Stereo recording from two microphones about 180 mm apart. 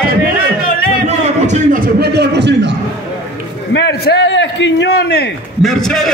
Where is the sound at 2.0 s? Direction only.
65° right (ahead or behind).